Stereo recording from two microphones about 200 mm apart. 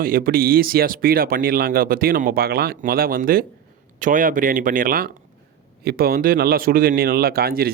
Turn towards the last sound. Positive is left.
turn(degrees=-50)  # may be behind; listen again after turning